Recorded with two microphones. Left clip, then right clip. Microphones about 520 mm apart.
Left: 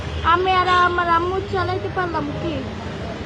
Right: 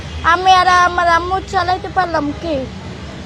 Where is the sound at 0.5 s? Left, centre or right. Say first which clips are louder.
Right 6 dB; right.